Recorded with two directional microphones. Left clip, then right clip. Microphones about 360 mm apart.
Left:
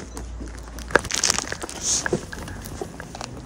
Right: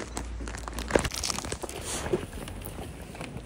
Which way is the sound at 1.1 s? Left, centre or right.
Left.